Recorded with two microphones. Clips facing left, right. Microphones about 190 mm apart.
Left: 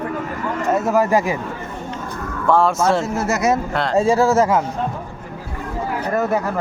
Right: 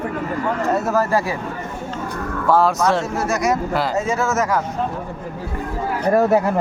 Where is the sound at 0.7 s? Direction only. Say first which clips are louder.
Left 4 dB; 15° left (ahead or behind).